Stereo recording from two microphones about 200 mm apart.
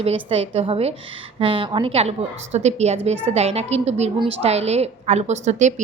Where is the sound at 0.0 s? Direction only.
30° right (ahead or behind).